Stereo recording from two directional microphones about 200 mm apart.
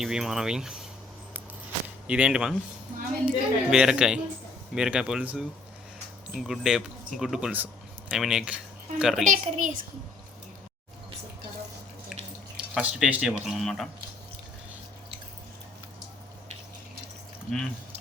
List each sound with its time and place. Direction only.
0.0 s speech: centre (ahead or behind)
2.0 s speech: 5° right (ahead or behind)
9.2 s a child's voice: 40° right (ahead or behind)
12.5 s speech: 5° right (ahead or behind)